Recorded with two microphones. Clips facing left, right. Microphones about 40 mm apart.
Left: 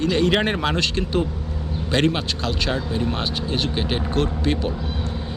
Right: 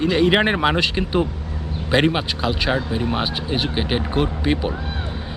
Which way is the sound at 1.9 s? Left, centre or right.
Centre.